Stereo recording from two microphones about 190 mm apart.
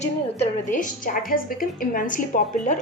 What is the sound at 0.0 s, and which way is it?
A woman's voice, 40° left (ahead or behind).